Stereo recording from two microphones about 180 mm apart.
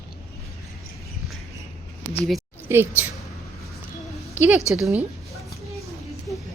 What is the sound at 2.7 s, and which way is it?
Speech, 15° right (ahead or behind).